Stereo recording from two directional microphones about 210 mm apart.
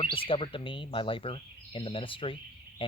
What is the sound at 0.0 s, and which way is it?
Speech, 25° left (ahead or behind).